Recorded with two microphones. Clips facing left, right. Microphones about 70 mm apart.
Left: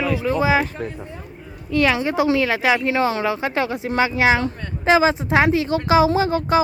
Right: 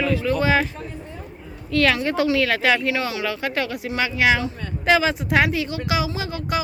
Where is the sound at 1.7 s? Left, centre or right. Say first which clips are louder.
Left 1 dB; centre.